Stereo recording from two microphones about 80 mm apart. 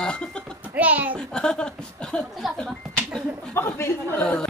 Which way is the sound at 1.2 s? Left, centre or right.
Centre.